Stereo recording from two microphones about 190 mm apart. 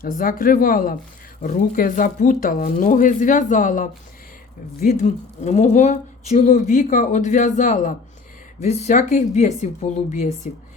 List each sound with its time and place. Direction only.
0.0 s a woman's voice: 50° left (ahead or behind)